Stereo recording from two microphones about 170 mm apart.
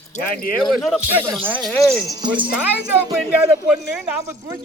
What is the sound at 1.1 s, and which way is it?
Speech, 10° right (ahead or behind).